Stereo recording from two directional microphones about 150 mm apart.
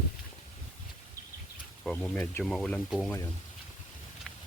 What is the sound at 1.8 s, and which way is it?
Speech, 5° left (ahead or behind).